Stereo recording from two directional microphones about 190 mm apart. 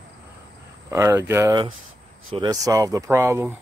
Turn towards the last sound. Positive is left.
turn(degrees=-15)  # may be behind; listen again after turning